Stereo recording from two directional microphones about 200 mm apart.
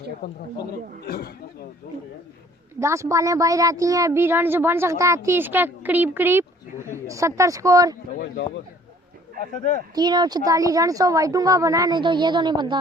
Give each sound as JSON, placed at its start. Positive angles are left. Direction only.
{"t": 0.2, "sound": "speech", "side_deg": 55}
{"t": 2.8, "sound": "speech", "side_deg": -15}
{"t": 9.9, "sound": "speech", "side_deg": -20}